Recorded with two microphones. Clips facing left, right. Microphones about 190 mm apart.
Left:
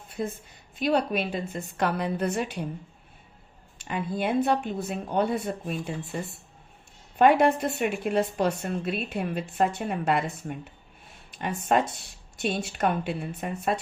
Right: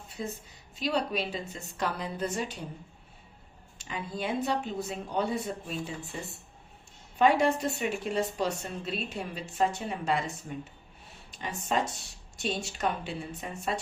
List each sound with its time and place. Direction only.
0.2 s a woman's voice: 55° left (ahead or behind)
3.8 s a woman's voice: 55° left (ahead or behind)
7.2 s a woman's voice: 55° left (ahead or behind)